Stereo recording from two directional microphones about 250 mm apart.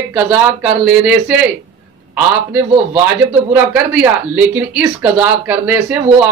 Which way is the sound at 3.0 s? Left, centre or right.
Centre.